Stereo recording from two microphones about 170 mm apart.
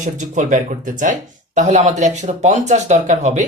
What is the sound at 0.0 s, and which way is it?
Speech, 45° right (ahead or behind).